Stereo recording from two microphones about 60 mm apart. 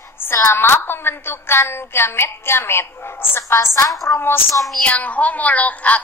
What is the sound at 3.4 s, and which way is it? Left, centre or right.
Speech, left.